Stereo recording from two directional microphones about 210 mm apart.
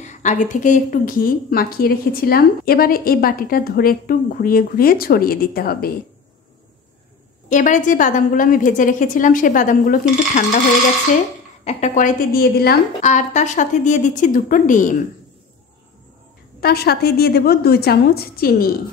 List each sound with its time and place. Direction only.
0.0 s a woman's voice: 35° left (ahead or behind)
7.4 s a woman's voice: 35° left (ahead or behind)
11.6 s a woman's voice: 35° left (ahead or behind)
16.6 s a woman's voice: 50° left (ahead or behind)